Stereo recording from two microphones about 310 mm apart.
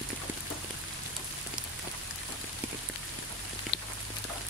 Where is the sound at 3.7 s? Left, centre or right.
Left.